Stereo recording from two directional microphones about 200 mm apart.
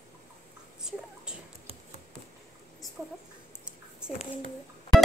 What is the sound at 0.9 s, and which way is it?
Whispering, 5° right (ahead or behind).